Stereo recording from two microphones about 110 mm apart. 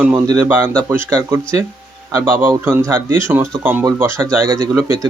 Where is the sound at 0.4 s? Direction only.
15° right (ahead or behind).